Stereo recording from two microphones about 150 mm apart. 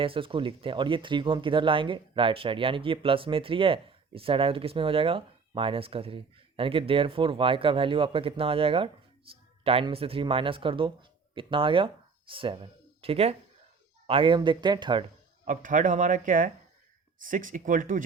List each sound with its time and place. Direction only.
0.0 s speech: 35° right (ahead or behind)
15.4 s speech: 60° right (ahead or behind)